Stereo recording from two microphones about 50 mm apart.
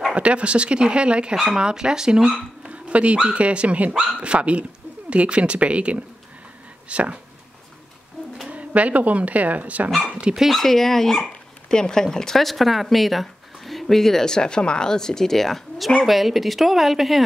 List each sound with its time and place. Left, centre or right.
0.1 s speech: right
2.7 s speech: right
8.5 s speech: right
10.3 s speech: centre